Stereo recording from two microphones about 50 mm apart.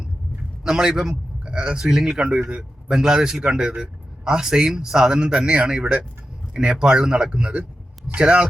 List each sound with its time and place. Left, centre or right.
0.6 s a man's voice: centre